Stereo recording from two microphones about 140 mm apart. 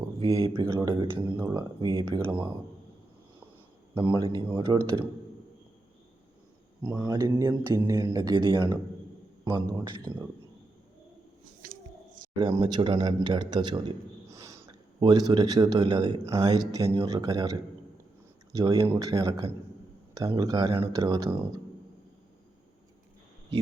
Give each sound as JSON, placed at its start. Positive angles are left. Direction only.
{"t": 0.2, "sound": "speech", "side_deg": -30}
{"t": 1.3, "sound": "speech", "side_deg": -10}
{"t": 1.5, "sound": "speech", "side_deg": -35}
{"t": 3.9, "sound": "speech", "side_deg": -35}
{"t": 6.8, "sound": "speech", "side_deg": -30}
{"t": 11.7, "sound": "a sound", "side_deg": -75}
{"t": 12.4, "sound": "a man's voice", "side_deg": -30}